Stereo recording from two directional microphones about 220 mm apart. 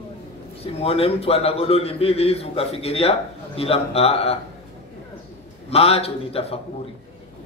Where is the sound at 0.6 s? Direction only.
25° left (ahead or behind).